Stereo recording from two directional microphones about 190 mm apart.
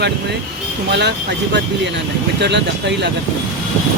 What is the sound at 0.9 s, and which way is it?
Speech, 65° right (ahead or behind).